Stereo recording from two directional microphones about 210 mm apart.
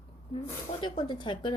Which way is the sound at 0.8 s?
20° left (ahead or behind).